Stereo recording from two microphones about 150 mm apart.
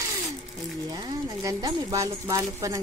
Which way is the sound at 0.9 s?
25° right (ahead or behind).